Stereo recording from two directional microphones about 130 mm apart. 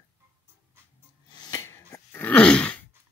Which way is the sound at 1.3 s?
30° left (ahead or behind).